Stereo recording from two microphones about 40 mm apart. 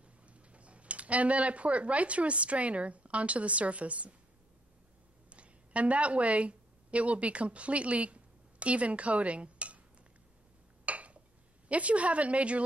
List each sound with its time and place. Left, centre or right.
0.3 s speech: right
5.3 s a woman's voice: right
10.9 s a sound: right
11.7 s a woman's voice: right